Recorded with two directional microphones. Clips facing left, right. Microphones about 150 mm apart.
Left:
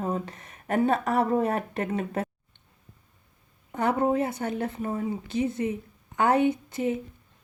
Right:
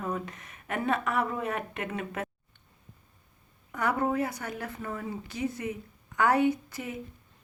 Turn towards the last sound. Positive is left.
turn(degrees=25)  # may be behind; listen again after turning